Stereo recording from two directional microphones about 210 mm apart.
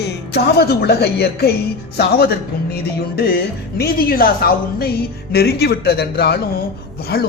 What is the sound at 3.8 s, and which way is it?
A woman's voice, 45° left (ahead or behind).